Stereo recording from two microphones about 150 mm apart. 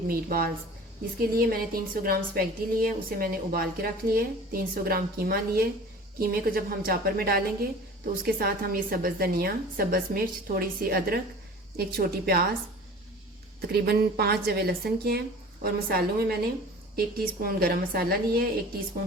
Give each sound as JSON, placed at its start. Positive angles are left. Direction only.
{"t": 0.1, "sound": "a woman's voice", "side_deg": -85}
{"t": 8.2, "sound": "a woman's voice", "side_deg": -80}
{"t": 13.6, "sound": "a woman's voice", "side_deg": -90}